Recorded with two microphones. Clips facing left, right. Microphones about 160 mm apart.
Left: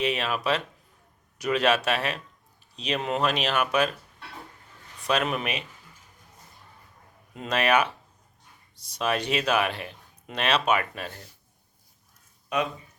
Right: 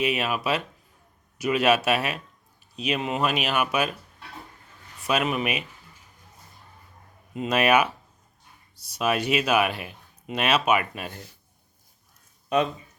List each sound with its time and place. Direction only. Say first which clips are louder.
0.0 s speech: right 1 dB; 10° right (ahead or behind)
5.0 s speech: right 1 dB; 5° right (ahead or behind)
7.3 s speech: right 3 dB; 10° right (ahead or behind)
12.5 s speech: right 4 dB; 30° right (ahead or behind)